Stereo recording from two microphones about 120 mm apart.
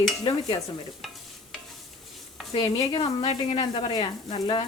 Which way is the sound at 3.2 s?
50° left (ahead or behind).